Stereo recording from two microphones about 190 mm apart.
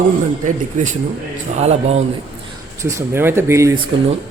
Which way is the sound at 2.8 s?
15° right (ahead or behind).